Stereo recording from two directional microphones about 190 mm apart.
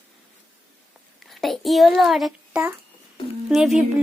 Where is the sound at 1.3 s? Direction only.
Centre (ahead or behind).